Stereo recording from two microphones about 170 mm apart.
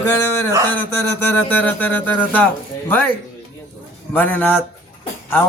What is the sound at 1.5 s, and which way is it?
Speech, 10° left (ahead or behind).